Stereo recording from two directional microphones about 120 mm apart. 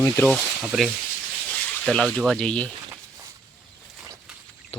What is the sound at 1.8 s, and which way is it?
Speech, 5° left (ahead or behind).